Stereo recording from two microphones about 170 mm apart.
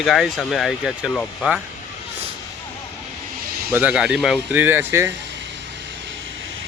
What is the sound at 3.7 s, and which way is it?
Speech, 5° right (ahead or behind).